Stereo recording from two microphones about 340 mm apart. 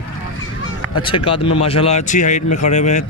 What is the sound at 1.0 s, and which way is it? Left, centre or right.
Speech, centre.